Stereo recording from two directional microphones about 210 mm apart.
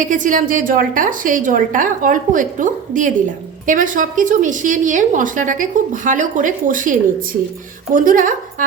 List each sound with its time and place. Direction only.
0.0 s a woman's voice: 40° right (ahead or behind)
7.9 s a woman's voice: 40° right (ahead or behind)